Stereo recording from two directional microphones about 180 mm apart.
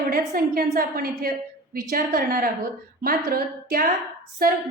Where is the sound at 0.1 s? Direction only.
55° right (ahead or behind).